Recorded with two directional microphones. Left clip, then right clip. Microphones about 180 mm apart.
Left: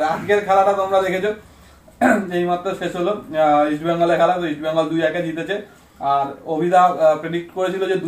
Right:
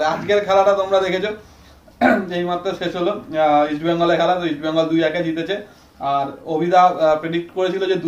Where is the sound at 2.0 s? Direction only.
25° right (ahead or behind).